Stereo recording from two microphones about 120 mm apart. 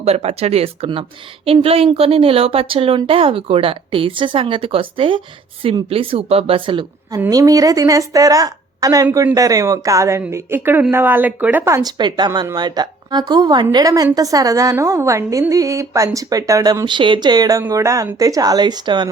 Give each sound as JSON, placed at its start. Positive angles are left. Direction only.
{"t": 0.0, "sound": "speech", "side_deg": -55}
{"t": 7.3, "sound": "a woman's voice", "side_deg": -30}
{"t": 16.8, "sound": "speech", "side_deg": -40}